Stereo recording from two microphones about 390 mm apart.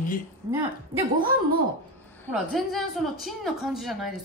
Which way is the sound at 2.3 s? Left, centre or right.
Centre.